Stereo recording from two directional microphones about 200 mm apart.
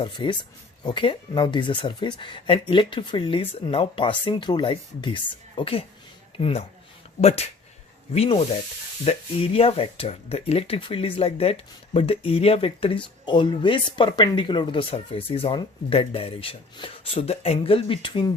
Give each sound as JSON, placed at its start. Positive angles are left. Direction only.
{"t": 0.0, "sound": "speech", "side_deg": 25}